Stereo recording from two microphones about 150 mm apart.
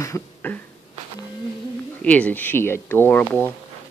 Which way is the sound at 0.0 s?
15° left (ahead or behind).